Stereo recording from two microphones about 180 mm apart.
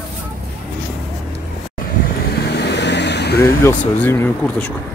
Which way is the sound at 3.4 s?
15° left (ahead or behind).